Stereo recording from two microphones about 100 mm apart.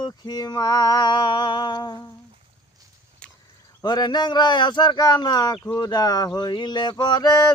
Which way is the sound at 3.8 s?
45° left (ahead or behind).